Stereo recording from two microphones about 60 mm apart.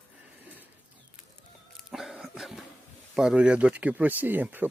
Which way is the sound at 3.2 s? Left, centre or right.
Centre.